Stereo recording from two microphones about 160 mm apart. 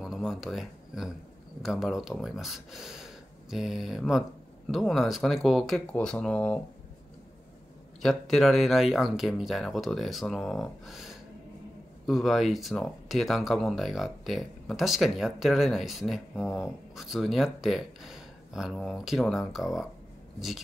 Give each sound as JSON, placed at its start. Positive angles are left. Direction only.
{"t": 0.0, "sound": "speech", "side_deg": 0}
{"t": 8.0, "sound": "speech", "side_deg": 0}